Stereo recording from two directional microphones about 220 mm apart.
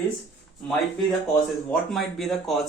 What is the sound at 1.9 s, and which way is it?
Speech, centre (ahead or behind).